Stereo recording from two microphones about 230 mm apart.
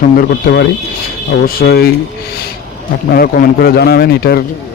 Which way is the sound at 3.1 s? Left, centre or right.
Left.